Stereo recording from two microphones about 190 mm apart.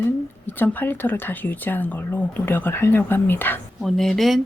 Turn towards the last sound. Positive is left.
turn(degrees=0)  # may be behind; listen again after turning